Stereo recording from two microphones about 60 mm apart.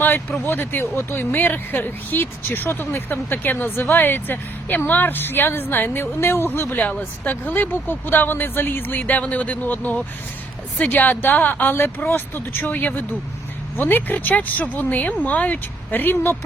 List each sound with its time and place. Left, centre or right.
0.0 s speech: left